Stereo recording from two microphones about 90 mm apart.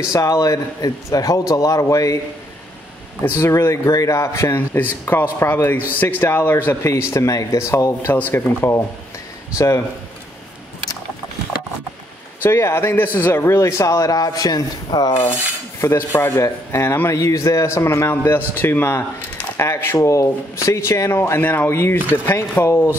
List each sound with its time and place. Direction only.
0.1 s speech: 40° left (ahead or behind)
3.3 s a man's voice: 30° left (ahead or behind)
12.4 s speech: 30° left (ahead or behind); by 15.1 s 55° left (ahead or behind)
15.8 s a man's voice: 25° left (ahead or behind)